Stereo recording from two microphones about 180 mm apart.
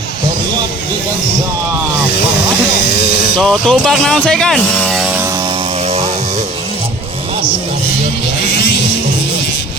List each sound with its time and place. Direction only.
2.9 s a sound: 70° left (ahead or behind)
3.3 s speech: 5° left (ahead or behind)
8.4 s vehicle: 65° left (ahead or behind)